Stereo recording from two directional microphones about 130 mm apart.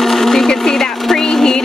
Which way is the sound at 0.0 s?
Centre (ahead or behind).